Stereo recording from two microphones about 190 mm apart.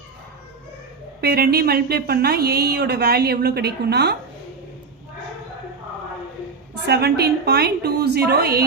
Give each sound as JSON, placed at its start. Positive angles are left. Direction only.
{"t": 1.2, "sound": "speech", "side_deg": -55}
{"t": 6.8, "sound": "speech", "side_deg": -60}